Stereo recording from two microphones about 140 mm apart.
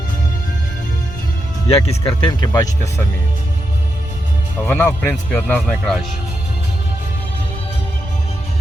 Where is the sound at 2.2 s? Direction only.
30° left (ahead or behind).